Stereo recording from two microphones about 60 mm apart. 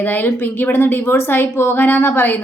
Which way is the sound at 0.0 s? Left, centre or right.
Left.